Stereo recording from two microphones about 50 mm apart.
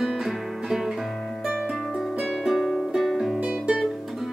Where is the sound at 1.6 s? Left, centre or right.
Centre.